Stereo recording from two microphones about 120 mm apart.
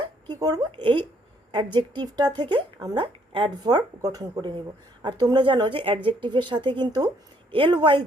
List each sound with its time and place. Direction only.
0.3 s speech: 30° right (ahead or behind)